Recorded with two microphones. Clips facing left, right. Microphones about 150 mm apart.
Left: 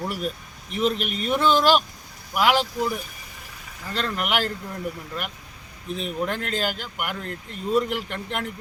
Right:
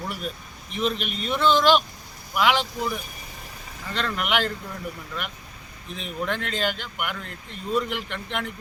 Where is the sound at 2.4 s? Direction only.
40° left (ahead or behind).